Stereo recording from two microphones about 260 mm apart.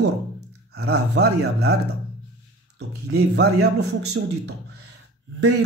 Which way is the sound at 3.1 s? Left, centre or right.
Right.